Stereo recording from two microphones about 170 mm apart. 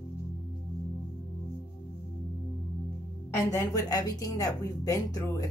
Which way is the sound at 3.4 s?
20° left (ahead or behind).